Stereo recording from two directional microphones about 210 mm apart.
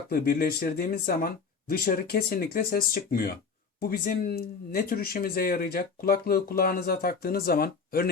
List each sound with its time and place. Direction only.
0.1 s speech: 45° left (ahead or behind)